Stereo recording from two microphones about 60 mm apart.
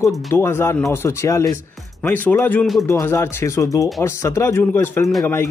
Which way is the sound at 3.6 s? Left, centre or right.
Left.